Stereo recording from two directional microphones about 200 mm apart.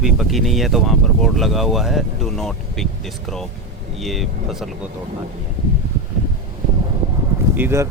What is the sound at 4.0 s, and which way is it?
Speech, centre (ahead or behind).